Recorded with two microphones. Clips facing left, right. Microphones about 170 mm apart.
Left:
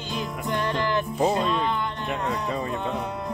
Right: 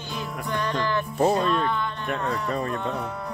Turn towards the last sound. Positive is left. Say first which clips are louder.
# left 1 dB
turn(degrees=20)  # may be behind; listen again after turning